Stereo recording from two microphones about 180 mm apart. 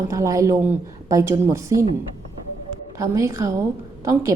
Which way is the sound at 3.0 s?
15° right (ahead or behind).